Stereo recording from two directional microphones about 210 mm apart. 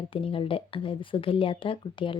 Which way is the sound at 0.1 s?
25° left (ahead or behind).